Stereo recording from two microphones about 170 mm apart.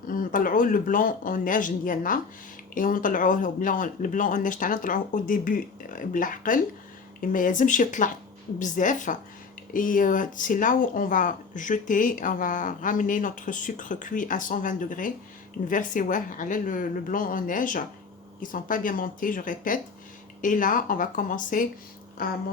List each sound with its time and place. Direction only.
0.1 s speech: 55° left (ahead or behind)